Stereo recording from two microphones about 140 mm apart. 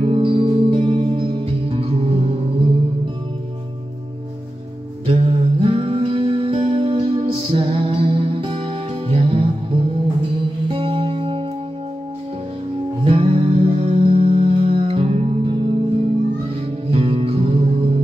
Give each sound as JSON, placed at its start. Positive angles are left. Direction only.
{"t": 0.0, "sound": "music", "side_deg": -40}
{"t": 5.0, "sound": "music", "side_deg": -40}
{"t": 10.7, "sound": "music", "side_deg": -40}
{"t": 13.0, "sound": "music", "side_deg": -40}